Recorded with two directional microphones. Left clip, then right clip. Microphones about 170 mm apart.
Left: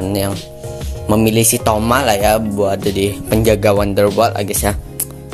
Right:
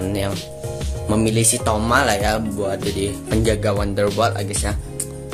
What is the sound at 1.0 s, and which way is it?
Speech, 35° left (ahead or behind).